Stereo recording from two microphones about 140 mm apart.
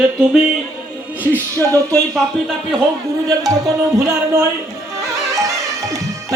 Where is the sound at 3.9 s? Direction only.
20° right (ahead or behind).